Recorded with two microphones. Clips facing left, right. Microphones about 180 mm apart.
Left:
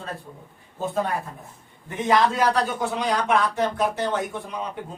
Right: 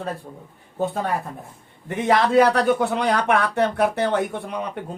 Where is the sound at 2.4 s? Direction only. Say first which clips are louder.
Right 6 dB; 65° right (ahead or behind).